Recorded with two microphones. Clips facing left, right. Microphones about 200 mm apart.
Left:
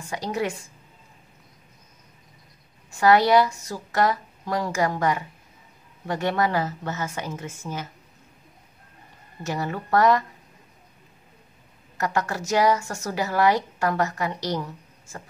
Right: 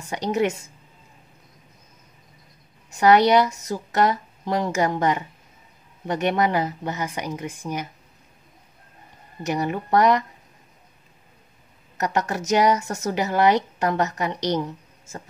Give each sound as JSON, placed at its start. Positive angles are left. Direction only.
{"t": 0.0, "sound": "speech", "side_deg": -20}
{"t": 2.9, "sound": "speech", "side_deg": -20}
{"t": 9.4, "sound": "speech", "side_deg": -20}
{"t": 12.0, "sound": "speech", "side_deg": -20}